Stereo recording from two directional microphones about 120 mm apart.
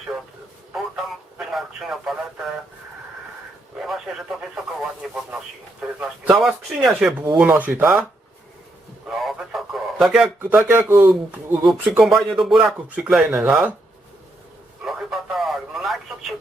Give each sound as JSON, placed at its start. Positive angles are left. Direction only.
{"t": 1.4, "sound": "speech", "side_deg": 0}
{"t": 3.8, "sound": "speech", "side_deg": -5}
{"t": 9.0, "sound": "radio", "side_deg": 0}
{"t": 10.4, "sound": "speech", "side_deg": -15}
{"t": 11.6, "sound": "speech", "side_deg": 0}
{"t": 14.8, "sound": "a sound", "side_deg": 0}